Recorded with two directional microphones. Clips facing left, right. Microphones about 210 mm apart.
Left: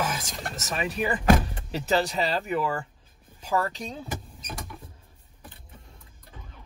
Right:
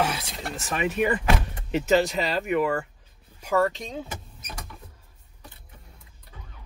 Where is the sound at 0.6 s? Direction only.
40° left (ahead or behind).